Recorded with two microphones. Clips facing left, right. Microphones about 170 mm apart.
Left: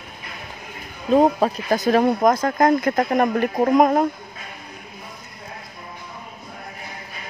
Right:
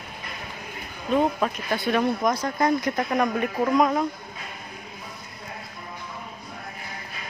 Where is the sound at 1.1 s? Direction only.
40° left (ahead or behind).